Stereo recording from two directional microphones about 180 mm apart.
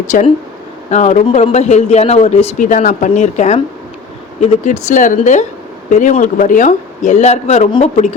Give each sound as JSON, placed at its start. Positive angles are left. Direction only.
{"t": 0.1, "sound": "a man's voice", "side_deg": 50}